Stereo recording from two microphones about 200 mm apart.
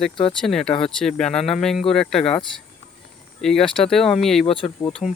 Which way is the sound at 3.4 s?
Centre (ahead or behind).